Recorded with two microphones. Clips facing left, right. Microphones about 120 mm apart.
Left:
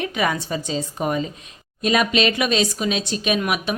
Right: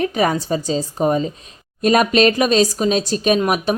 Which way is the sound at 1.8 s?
45° right (ahead or behind).